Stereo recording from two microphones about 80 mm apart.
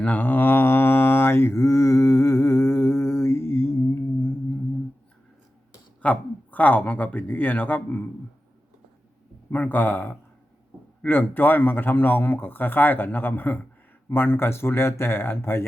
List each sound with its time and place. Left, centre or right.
0.0 s mantra: left
6.0 s speech: centre
9.5 s a man's voice: left